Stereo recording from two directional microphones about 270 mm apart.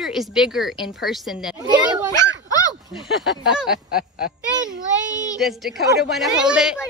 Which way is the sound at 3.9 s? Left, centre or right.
Left.